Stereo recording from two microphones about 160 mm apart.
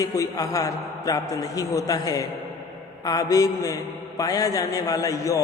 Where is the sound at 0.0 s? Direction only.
20° left (ahead or behind).